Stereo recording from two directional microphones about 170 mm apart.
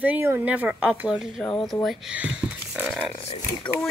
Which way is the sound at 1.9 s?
5° right (ahead or behind).